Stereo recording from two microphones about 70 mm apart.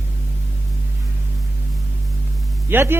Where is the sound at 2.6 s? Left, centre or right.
Right.